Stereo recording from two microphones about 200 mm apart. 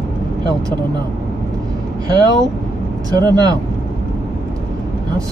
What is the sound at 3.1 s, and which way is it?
Speech, 20° right (ahead or behind).